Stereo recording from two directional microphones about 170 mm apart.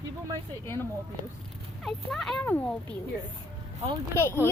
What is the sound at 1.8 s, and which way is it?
Speech, centre (ahead or behind).